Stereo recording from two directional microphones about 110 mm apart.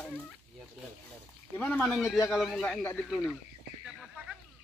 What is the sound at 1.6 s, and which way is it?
Speech, 10° left (ahead or behind).